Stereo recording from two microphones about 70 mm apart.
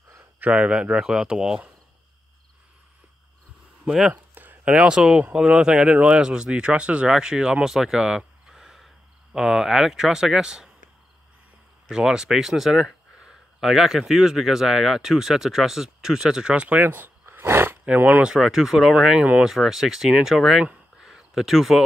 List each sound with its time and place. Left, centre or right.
0.4 s speech: centre
3.8 s speech: centre
4.1 s a sound: right
4.7 s speech: centre
11.9 s speech: centre; by 17.7 s right
17.8 s speech: right
18.3 s speech: centre
19.4 s speech: centre
21.0 s a sound: centre